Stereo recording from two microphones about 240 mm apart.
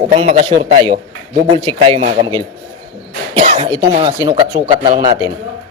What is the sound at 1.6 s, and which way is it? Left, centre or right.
Speech, right.